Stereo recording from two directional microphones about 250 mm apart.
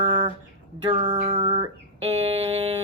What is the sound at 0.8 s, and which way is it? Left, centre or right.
Music, right.